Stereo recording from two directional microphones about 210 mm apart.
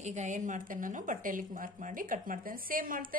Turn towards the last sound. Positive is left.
turn(degrees=-40)  # may be behind; listen again after turning